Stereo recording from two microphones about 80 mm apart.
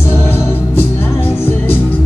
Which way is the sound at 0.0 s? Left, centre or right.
Left.